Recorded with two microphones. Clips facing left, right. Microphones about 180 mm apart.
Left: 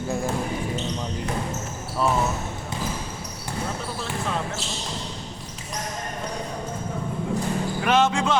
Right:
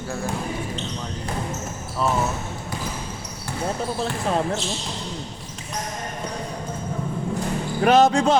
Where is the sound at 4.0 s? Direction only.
35° right (ahead or behind).